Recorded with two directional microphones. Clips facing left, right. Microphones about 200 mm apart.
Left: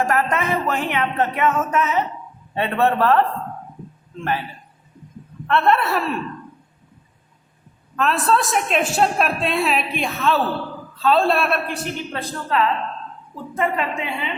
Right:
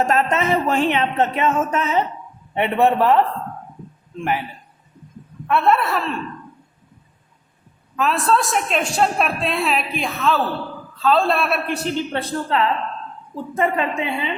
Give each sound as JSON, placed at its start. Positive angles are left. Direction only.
{"t": 0.0, "sound": "speech", "side_deg": -25}
{"t": 2.6, "sound": "a man's voice", "side_deg": -15}
{"t": 5.5, "sound": "a woman's voice", "side_deg": -5}
{"t": 7.9, "sound": "a woman's voice", "side_deg": 0}
{"t": 11.7, "sound": "speech", "side_deg": -30}